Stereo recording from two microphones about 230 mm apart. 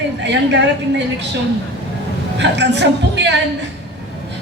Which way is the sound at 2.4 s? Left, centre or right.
Right.